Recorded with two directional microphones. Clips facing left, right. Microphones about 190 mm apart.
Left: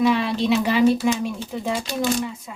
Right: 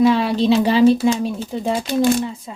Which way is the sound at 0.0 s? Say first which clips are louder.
Right 5 dB; 35° right (ahead or behind).